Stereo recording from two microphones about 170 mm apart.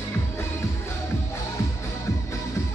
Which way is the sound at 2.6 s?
20° left (ahead or behind).